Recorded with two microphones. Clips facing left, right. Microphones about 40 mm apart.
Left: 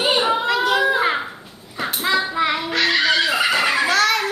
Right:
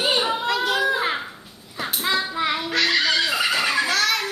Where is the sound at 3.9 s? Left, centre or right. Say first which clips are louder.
Left 4 dB; centre.